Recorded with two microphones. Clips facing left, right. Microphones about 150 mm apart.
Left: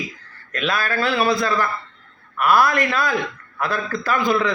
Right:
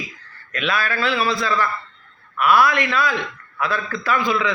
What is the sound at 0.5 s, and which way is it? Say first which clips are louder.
A man's voice: left 1 dB; 40° left (ahead or behind).